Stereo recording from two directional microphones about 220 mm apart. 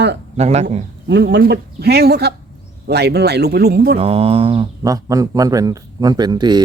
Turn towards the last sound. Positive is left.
turn(degrees=-20)  # may be behind; listen again after turning